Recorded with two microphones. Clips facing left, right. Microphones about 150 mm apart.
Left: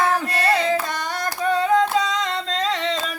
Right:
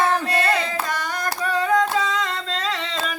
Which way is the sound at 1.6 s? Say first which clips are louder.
Left 1 dB; 30° left (ahead or behind).